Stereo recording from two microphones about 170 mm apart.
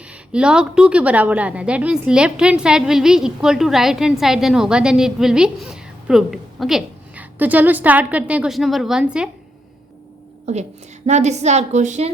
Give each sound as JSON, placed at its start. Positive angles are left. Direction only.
{"t": 0.1, "sound": "a woman's voice", "side_deg": -5}
{"t": 10.4, "sound": "a woman's voice", "side_deg": -40}